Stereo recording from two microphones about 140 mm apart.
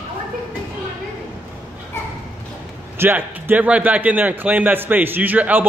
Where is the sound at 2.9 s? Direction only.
15° right (ahead or behind).